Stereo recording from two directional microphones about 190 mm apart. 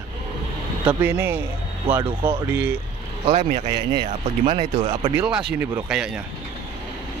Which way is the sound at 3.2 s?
35° right (ahead or behind).